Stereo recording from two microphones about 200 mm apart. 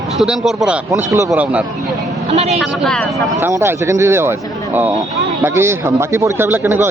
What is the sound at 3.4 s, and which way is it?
A man's voice, 10° right (ahead or behind).